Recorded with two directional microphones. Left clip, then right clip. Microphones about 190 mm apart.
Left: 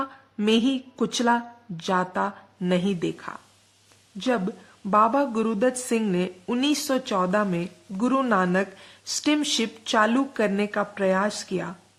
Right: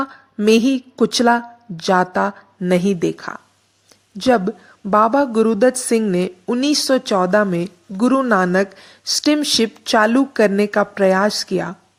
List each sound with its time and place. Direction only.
0.4 s a woman's voice: 30° right (ahead or behind)